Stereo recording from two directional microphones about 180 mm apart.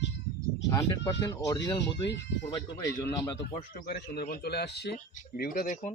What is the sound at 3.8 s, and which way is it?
Speech, 60° left (ahead or behind).